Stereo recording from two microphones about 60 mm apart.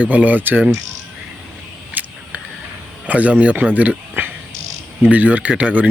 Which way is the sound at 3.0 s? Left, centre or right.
Right.